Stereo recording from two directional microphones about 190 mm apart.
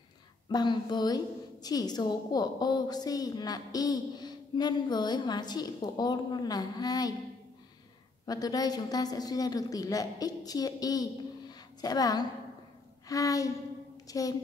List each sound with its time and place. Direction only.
0.5 s a woman's voice: 20° left (ahead or behind)
8.3 s a woman's voice: 20° left (ahead or behind)
13.1 s a sound: 15° left (ahead or behind)
14.0 s a woman's voice: 20° left (ahead or behind)